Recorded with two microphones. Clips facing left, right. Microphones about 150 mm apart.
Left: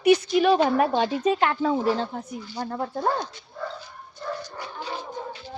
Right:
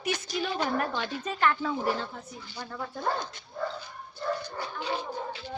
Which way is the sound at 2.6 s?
45° left (ahead or behind).